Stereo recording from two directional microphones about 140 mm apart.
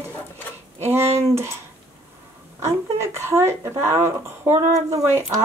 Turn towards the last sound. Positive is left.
turn(degrees=-20)  # may be behind; listen again after turning